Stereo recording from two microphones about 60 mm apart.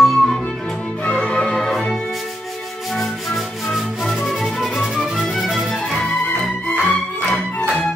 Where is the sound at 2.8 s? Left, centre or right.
Centre.